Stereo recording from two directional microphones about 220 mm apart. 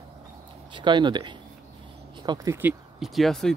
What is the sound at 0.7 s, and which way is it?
Speech, 20° right (ahead or behind).